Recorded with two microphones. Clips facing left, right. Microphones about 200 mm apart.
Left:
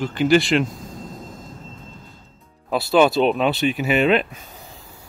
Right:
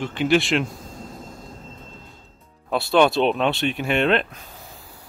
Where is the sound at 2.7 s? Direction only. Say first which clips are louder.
Left 1 dB; centre (ahead or behind).